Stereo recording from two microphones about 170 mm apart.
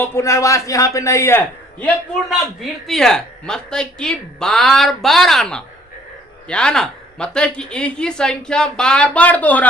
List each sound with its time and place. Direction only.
0.0 s a man's voice: 15° left (ahead or behind)
2.6 s speech: centre (ahead or behind)